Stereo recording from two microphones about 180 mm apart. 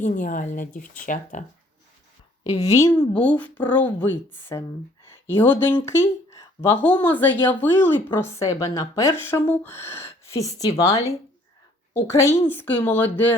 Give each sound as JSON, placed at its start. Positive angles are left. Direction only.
{"t": 0.0, "sound": "speech", "side_deg": 45}
{"t": 2.4, "sound": "a woman's voice", "side_deg": 20}
{"t": 3.3, "sound": "a woman's voice", "side_deg": 10}